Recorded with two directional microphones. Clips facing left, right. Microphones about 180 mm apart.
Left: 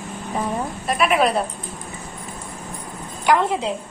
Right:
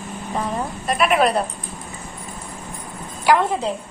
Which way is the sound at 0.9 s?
Centre (ahead or behind).